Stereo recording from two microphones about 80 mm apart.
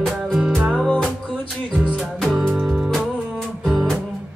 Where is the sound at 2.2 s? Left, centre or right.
Centre.